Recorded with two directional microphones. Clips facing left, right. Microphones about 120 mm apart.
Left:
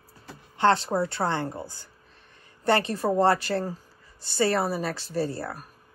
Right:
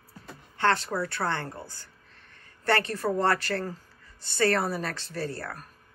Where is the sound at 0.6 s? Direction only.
25° left (ahead or behind); by 5.7 s 10° left (ahead or behind).